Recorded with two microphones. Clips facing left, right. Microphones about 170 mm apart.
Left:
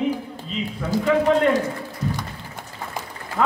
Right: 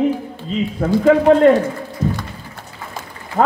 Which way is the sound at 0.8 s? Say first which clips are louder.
Right 8 dB; 45° right (ahead or behind).